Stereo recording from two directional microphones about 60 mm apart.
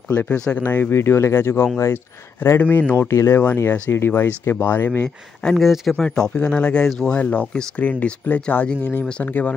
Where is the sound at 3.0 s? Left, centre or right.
Left.